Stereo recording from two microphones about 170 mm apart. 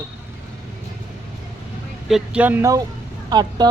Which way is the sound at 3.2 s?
25° right (ahead or behind).